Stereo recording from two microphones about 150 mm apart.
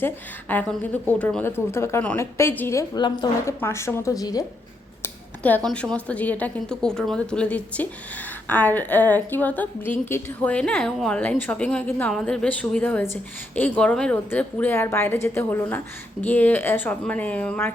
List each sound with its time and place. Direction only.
0.0 s a woman's voice: 10° left (ahead or behind)
5.0 s a woman's voice: 10° left (ahead or behind)